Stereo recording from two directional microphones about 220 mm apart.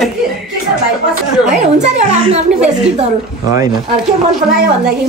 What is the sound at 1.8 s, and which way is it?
Speech, 30° right (ahead or behind).